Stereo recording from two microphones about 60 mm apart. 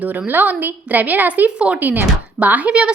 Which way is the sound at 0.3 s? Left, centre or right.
Right.